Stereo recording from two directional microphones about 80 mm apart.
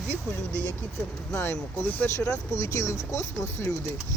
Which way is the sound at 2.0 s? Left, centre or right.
Left.